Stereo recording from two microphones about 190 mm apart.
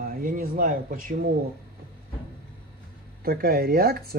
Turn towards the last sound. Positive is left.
turn(degrees=-55)  # may be behind; listen again after turning